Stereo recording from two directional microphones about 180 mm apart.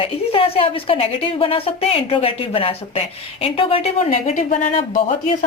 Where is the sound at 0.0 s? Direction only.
30° left (ahead or behind).